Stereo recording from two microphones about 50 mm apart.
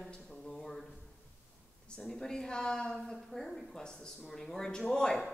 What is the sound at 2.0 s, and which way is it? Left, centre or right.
A woman's voice, centre.